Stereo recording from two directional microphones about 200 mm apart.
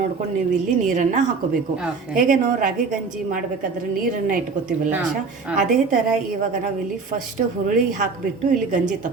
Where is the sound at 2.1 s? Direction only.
40° right (ahead or behind).